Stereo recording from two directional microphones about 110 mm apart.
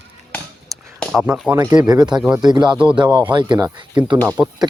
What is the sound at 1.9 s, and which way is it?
Speech, 40° right (ahead or behind).